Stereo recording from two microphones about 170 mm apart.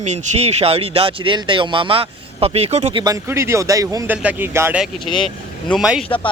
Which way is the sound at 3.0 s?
20° right (ahead or behind).